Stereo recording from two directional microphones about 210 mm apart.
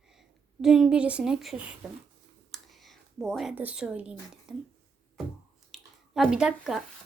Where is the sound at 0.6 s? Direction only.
Centre (ahead or behind).